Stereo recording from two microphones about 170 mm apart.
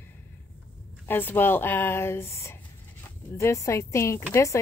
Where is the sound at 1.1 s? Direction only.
10° left (ahead or behind).